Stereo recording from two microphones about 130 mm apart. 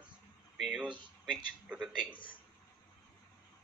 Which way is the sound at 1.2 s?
5° right (ahead or behind).